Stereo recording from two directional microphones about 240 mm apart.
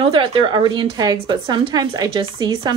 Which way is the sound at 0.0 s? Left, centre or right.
Right.